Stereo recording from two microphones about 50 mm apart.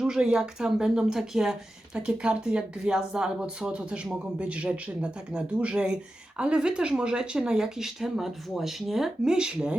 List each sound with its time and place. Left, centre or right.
0.0 s speech: centre
1.9 s speech: centre